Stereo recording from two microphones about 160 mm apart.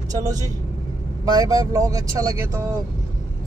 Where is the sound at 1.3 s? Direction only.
20° right (ahead or behind).